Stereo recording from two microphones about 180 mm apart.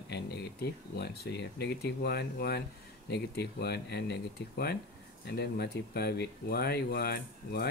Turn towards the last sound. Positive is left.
turn(degrees=60)  # may be behind; listen again after turning